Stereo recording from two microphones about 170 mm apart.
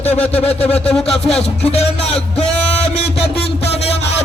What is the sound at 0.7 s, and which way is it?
Speech, 5° left (ahead or behind).